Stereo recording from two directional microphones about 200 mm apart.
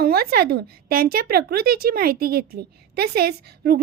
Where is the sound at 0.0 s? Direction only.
50° right (ahead or behind).